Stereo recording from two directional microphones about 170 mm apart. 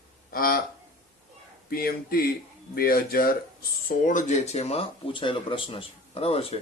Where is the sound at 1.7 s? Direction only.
65° left (ahead or behind).